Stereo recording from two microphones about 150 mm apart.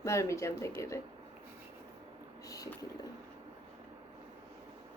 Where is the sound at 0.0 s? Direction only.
20° left (ahead or behind).